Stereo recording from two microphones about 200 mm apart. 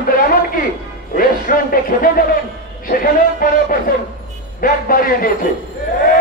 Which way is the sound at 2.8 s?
45° left (ahead or behind).